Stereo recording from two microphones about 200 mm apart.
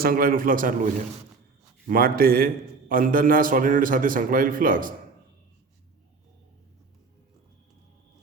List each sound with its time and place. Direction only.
0.0 s a man's voice: 45° right (ahead or behind)
1.9 s a man's voice: 45° right (ahead or behind)